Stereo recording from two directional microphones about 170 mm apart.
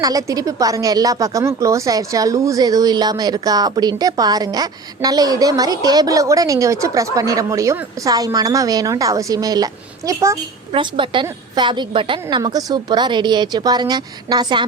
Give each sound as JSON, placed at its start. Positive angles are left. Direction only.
{"t": 0.0, "sound": "a woman's voice", "side_deg": -20}
{"t": 10.7, "sound": "speech", "side_deg": -30}